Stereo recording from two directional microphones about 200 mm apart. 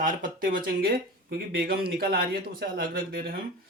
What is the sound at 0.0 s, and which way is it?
Speech, 40° right (ahead or behind).